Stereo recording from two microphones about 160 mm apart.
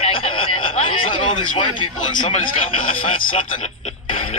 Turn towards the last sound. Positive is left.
turn(degrees=35)  # may be behind; listen again after turning